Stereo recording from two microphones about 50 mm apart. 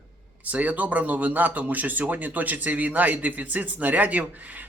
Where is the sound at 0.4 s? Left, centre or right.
Right.